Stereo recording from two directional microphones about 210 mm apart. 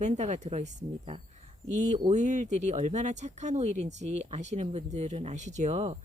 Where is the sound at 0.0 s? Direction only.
35° right (ahead or behind).